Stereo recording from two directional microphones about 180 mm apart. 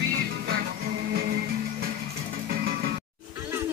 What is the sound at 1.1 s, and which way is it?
Music, 60° right (ahead or behind).